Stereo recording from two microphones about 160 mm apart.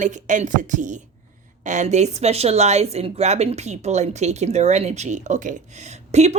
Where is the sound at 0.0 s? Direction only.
50° right (ahead or behind).